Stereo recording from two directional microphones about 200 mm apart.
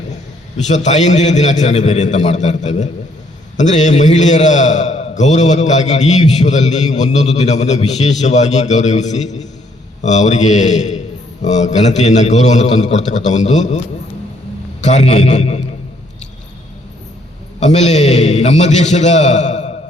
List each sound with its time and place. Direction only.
0.7 s a man's voice: 35° left (ahead or behind)
14.8 s a man's voice: 35° left (ahead or behind)
17.6 s a man's voice: 35° left (ahead or behind)